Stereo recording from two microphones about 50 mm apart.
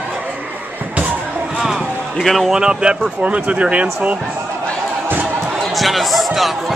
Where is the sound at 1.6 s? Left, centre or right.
Centre.